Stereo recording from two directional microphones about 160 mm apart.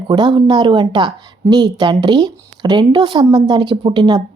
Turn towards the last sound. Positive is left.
turn(degrees=-25)  # may be behind; listen again after turning